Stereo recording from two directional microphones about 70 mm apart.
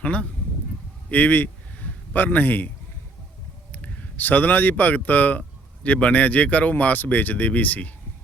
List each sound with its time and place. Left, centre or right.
0.0 s speech: centre
1.1 s a sound: left
3.7 s speech: left